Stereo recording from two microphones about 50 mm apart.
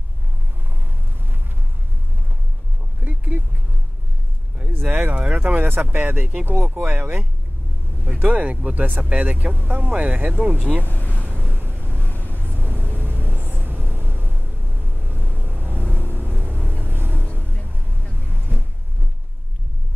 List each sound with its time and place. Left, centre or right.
3.0 s a sound: right
4.8 s speech: centre
5.4 s speech: right
6.5 s speech: right
10.9 s vehicle: left
11.4 s vehicle: right
11.9 s vehicle: left
12.4 s vehicle: right
15.7 s vehicle: left
16.8 s vehicle: right
17.3 s vehicle: left